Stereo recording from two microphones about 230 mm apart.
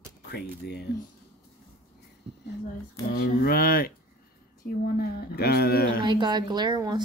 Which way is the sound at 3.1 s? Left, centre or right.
Left.